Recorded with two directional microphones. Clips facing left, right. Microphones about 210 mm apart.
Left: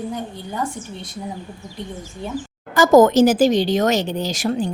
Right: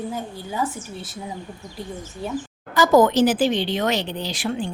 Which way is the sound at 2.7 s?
45° left (ahead or behind).